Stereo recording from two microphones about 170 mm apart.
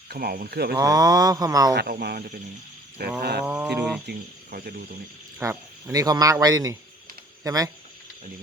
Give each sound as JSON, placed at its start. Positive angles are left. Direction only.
{"t": 0.1, "sound": "speech", "side_deg": -65}
{"t": 0.8, "sound": "mantra", "side_deg": -20}
{"t": 1.7, "sound": "speech", "side_deg": -65}
{"t": 3.2, "sound": "wild animals", "side_deg": -70}
{"t": 3.4, "sound": "a sound", "side_deg": -5}
{"t": 4.1, "sound": "wild animals", "side_deg": -70}
{"t": 5.4, "sound": "speech", "side_deg": -15}
{"t": 6.4, "sound": "mantra", "side_deg": -20}
{"t": 7.4, "sound": "speech", "side_deg": -20}